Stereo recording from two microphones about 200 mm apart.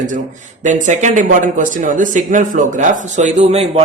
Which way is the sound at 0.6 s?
35° right (ahead or behind).